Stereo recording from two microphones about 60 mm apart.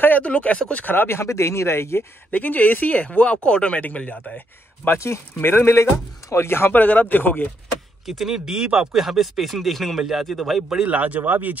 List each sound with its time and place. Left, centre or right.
0.0 s speech: left
0.8 s speech: left
2.3 s speech: left
4.8 s speech: left
6.7 s speech: left
8.1 s speech: centre
10.9 s speech: right